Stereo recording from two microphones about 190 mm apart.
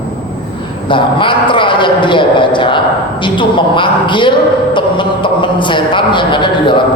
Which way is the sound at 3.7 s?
25° left (ahead or behind).